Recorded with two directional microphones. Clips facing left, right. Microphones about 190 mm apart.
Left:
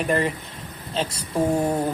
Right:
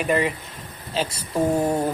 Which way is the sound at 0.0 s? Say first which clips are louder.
Right 1 dB; centre (ahead or behind).